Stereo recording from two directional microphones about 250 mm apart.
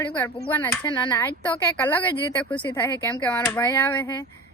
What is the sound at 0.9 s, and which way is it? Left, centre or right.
A woman's voice, centre.